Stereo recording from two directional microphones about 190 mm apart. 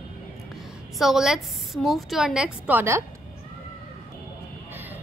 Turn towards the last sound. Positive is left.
turn(degrees=-10)  # may be behind; listen again after turning